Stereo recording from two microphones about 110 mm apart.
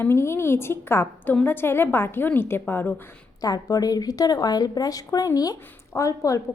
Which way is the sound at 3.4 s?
35° left (ahead or behind).